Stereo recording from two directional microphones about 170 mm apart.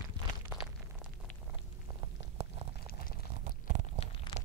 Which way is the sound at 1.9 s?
30° right (ahead or behind).